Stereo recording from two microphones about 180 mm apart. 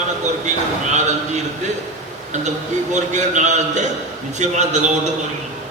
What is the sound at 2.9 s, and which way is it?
A man's voice, 40° right (ahead or behind).